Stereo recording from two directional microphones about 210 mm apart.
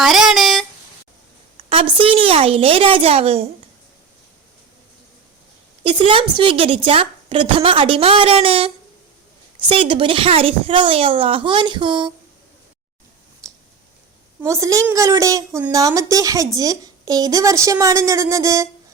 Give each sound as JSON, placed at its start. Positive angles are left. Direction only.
{"t": 0.0, "sound": "a sound", "side_deg": 0}
{"t": 1.5, "sound": "a woman's voice", "side_deg": -25}
{"t": 5.8, "sound": "a woman's voice", "side_deg": -25}
{"t": 14.4, "sound": "speech", "side_deg": -15}